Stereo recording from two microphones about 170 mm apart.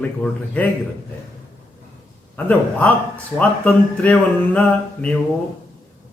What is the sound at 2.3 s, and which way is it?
Speech, 10° left (ahead or behind).